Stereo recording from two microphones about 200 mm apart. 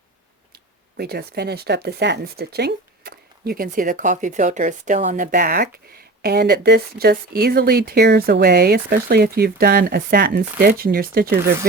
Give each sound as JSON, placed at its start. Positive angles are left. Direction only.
{"t": 0.9, "sound": "speech", "side_deg": -55}